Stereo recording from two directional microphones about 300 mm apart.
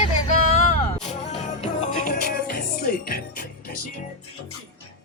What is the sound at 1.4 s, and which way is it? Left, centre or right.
Music, left.